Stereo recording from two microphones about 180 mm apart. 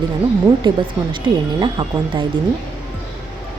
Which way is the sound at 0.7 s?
25° right (ahead or behind).